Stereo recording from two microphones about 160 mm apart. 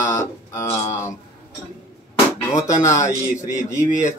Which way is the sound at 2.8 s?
50° left (ahead or behind).